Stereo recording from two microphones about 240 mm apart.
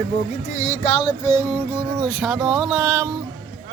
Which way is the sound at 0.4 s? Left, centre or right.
Left.